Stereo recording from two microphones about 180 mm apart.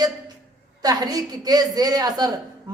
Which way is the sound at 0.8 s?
20° right (ahead or behind).